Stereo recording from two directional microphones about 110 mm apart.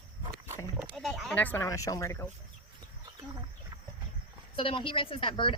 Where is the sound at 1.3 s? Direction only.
15° left (ahead or behind).